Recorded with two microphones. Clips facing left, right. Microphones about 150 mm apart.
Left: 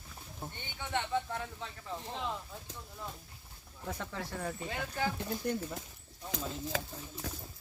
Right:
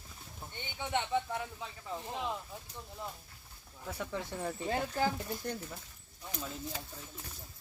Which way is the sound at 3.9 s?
10° right (ahead or behind).